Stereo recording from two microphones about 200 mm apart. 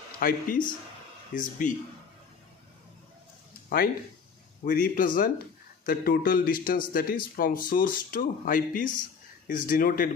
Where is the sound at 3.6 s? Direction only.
50° left (ahead or behind).